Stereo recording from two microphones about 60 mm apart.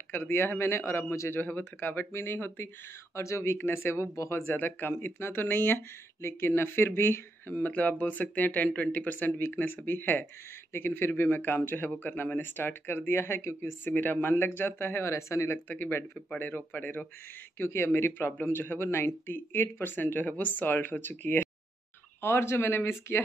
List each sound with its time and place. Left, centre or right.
0.1 s speech: left
1.3 s speech: left
3.2 s speech: left
4.5 s speech: left
13.8 s speech: left
16.3 s speech: left
17.6 s speech: left
22.2 s speech: left